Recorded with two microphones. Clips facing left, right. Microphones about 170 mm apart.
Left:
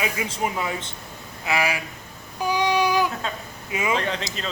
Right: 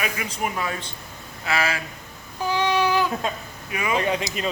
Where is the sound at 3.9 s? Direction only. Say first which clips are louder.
Right 4 dB; 10° right (ahead or behind).